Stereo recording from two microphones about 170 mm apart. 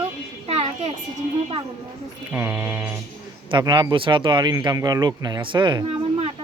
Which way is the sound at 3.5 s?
25° right (ahead or behind).